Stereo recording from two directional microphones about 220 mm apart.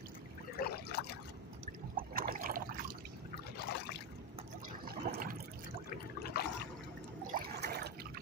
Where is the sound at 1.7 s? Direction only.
40° right (ahead or behind).